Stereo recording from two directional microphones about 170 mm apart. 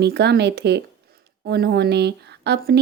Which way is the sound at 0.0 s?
75° right (ahead or behind).